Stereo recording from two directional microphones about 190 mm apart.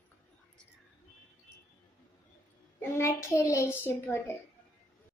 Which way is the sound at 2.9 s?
15° left (ahead or behind).